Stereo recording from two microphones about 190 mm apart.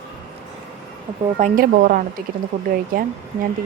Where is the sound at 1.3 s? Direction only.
45° right (ahead or behind).